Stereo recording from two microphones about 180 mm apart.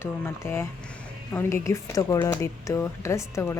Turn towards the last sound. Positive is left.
turn(degrees=15)  # may be behind; listen again after turning